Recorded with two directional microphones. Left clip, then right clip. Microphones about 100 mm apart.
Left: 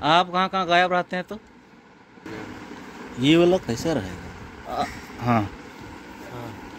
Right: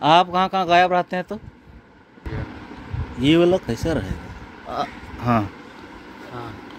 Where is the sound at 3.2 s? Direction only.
15° right (ahead or behind).